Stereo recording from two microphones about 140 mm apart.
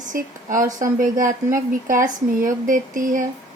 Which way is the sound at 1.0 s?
70° right (ahead or behind).